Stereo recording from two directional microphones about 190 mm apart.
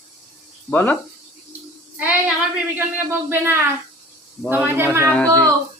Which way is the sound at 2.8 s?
10° right (ahead or behind).